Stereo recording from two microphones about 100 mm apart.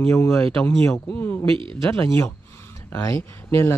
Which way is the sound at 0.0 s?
25° left (ahead or behind).